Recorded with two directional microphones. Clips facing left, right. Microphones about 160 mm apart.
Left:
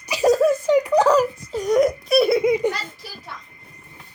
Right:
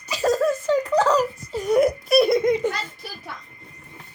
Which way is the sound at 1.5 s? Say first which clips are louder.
Left 1 dB; 5° right (ahead or behind).